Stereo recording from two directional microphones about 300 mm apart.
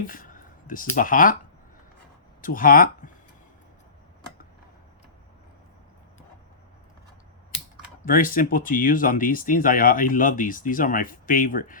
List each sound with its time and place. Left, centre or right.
0.0 s speech: left
2.4 s speech: left
8.0 s speech: left